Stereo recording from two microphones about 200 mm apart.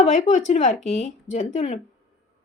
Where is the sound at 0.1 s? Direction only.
35° left (ahead or behind).